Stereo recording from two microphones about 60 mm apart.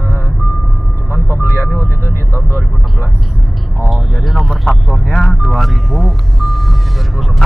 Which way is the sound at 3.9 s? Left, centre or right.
Centre.